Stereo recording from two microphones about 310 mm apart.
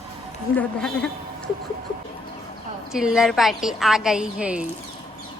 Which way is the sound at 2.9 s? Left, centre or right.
Centre.